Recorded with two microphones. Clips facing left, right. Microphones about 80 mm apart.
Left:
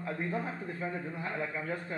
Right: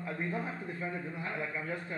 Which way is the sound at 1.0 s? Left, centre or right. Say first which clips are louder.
Left 1 dB; left.